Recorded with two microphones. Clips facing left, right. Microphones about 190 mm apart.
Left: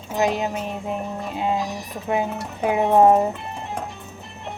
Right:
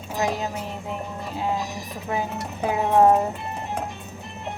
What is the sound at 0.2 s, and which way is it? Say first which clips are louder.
Speech: left 4 dB; 20° left (ahead or behind).